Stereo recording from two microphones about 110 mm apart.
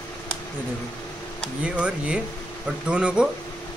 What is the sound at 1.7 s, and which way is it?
Speech, 10° right (ahead or behind).